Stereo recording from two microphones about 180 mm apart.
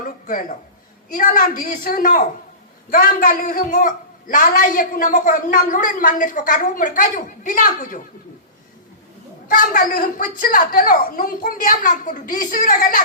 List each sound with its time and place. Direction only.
0.0 s a sound: 50° left (ahead or behind)
1.1 s a woman's voice: 50° left (ahead or behind)
9.5 s a woman's voice: 50° left (ahead or behind)